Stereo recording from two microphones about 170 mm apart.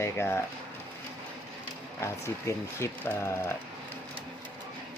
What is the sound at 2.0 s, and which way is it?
Speech, 15° left (ahead or behind).